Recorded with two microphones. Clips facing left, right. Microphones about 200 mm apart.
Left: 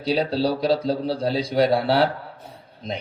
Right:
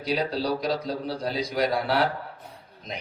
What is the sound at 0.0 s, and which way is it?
Speech, 30° left (ahead or behind).